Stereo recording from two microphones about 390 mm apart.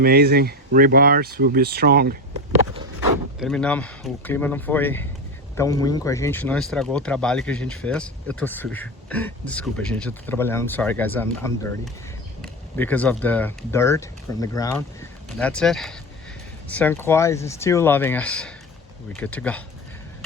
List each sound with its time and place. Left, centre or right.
0.0 s speech: right
3.4 s speech: centre